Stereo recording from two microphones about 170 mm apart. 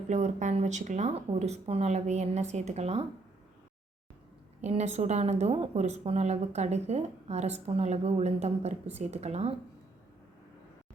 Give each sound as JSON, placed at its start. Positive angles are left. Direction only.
{"t": 0.1, "sound": "a woman's voice", "side_deg": -45}
{"t": 4.6, "sound": "a woman's voice", "side_deg": -40}